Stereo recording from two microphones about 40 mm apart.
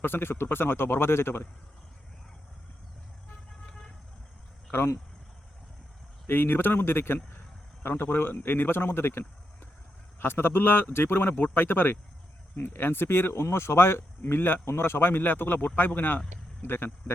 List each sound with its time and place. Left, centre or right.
0.0 s speech: left
6.2 s speech: left
10.2 s speech: left
11.3 s speech: left
12.5 s speech: left
16.6 s speech: left